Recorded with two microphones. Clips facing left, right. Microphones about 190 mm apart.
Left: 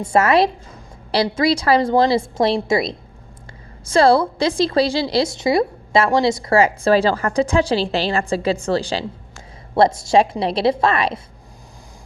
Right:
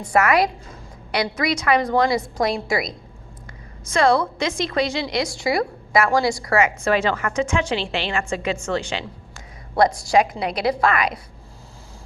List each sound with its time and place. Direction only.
0.0 s a woman's voice: 25° left (ahead or behind)